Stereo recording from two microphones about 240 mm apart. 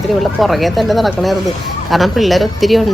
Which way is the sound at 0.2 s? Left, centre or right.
Centre.